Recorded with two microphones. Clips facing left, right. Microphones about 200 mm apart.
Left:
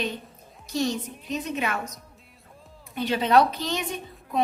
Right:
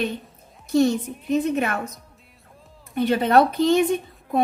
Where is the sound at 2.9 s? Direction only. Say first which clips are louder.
Right 3 dB; 55° right (ahead or behind).